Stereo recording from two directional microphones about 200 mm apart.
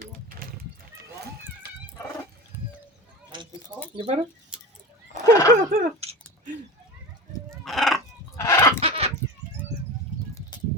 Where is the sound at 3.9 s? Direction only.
25° right (ahead or behind).